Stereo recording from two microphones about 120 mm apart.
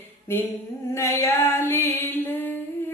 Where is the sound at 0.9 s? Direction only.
25° left (ahead or behind).